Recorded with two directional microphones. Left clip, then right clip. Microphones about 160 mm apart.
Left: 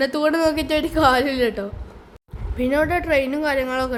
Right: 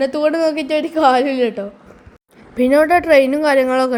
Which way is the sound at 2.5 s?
25° right (ahead or behind).